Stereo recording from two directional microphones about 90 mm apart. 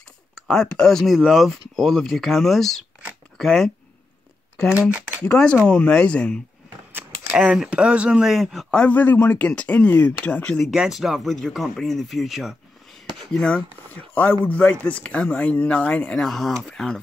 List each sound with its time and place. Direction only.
0.5 s speech: 5° left (ahead or behind)
5.2 s speech: 15° left (ahead or behind)
6.9 s a sound: 20° right (ahead or behind)
7.3 s speech: 10° right (ahead or behind)
8.8 s speech: 20° left (ahead or behind)
10.6 s speech: 5° right (ahead or behind)
13.3 s speech: 10° left (ahead or behind)